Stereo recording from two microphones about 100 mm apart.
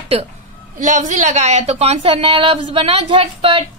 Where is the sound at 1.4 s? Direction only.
90° right.